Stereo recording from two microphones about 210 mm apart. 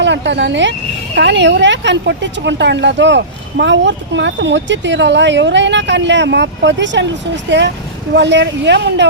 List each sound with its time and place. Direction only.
0.0 s speech: 55° right (ahead or behind)